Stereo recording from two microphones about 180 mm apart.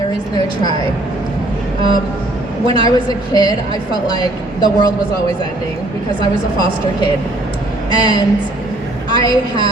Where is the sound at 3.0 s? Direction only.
20° left (ahead or behind).